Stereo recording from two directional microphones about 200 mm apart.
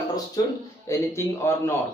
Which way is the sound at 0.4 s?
20° left (ahead or behind).